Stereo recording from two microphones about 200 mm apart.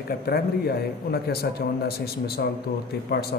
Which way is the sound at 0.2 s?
50° left (ahead or behind).